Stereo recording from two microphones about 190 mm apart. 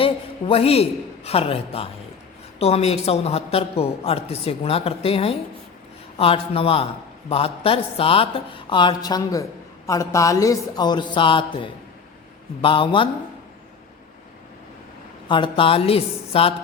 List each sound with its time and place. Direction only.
0.0 s a man's voice: 30° left (ahead or behind)
15.3 s speech: 25° left (ahead or behind)